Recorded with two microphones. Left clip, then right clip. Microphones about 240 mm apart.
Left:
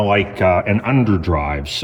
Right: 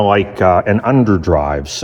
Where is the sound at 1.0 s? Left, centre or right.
Centre.